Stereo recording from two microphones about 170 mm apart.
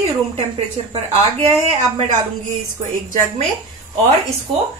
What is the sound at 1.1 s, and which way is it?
Speech, 40° right (ahead or behind).